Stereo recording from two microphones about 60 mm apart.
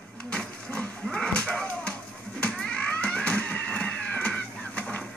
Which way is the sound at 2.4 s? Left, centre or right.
Centre.